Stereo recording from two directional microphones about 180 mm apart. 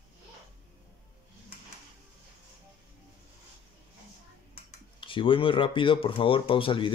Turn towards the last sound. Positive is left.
turn(degrees=30)  # may be behind; listen again after turning